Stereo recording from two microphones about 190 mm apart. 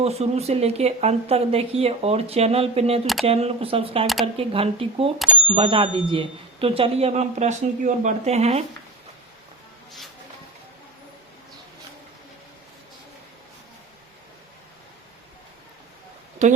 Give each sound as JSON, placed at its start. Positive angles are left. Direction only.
{"t": 0.0, "sound": "speech", "side_deg": -35}
{"t": 4.0, "sound": "speech", "side_deg": 0}
{"t": 4.4, "sound": "speech", "side_deg": -30}
{"t": 16.4, "sound": "speech", "side_deg": -35}